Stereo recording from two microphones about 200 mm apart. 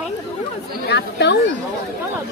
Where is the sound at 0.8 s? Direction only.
60° left (ahead or behind).